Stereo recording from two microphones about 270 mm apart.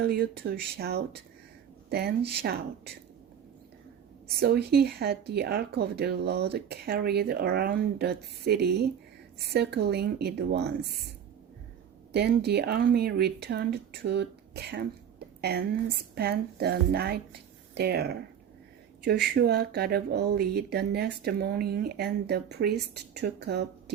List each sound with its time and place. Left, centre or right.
0.0 s speech: right
4.4 s speech: right
12.1 s a woman's voice: right
19.3 s speech: right